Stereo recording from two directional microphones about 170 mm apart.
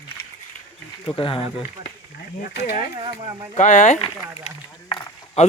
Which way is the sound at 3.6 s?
45° left (ahead or behind).